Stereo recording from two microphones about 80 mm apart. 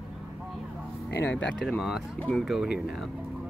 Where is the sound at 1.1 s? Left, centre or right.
Left.